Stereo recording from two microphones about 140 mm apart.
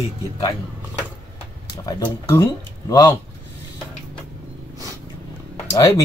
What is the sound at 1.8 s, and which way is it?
Speech, 25° left (ahead or behind).